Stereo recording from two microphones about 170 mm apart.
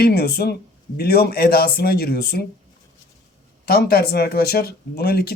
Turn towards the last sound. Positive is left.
turn(degrees=65)  # may be behind; listen again after turning